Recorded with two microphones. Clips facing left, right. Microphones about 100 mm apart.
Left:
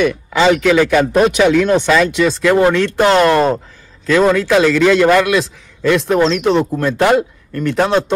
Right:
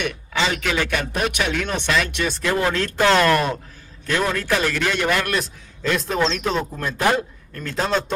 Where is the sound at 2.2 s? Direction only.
90° left.